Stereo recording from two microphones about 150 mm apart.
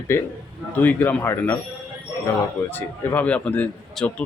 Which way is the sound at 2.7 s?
10° left (ahead or behind).